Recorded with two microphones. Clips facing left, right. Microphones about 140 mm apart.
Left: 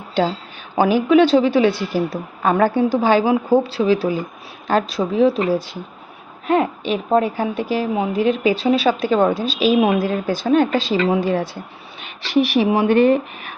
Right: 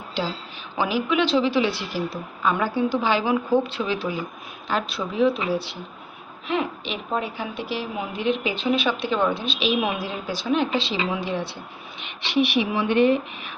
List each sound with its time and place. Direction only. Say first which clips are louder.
0.1 s a woman's voice: left 9 dB; 55° left (ahead or behind)
3.3 s a woman's voice: left 5 dB; 35° left (ahead or behind)